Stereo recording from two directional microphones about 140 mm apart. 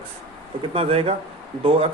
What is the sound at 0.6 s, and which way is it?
A man's voice, 45° right (ahead or behind).